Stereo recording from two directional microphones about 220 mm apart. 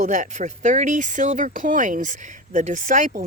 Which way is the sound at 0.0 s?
35° right (ahead or behind).